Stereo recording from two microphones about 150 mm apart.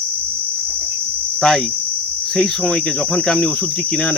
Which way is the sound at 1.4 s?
5° left (ahead or behind).